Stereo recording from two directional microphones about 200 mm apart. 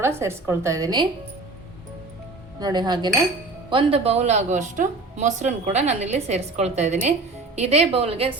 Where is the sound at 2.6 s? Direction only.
20° right (ahead or behind).